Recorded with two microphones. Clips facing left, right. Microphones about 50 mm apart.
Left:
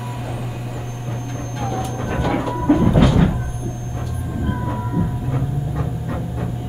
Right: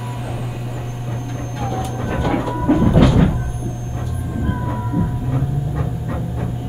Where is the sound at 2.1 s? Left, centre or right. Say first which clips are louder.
Right 1 dB; centre.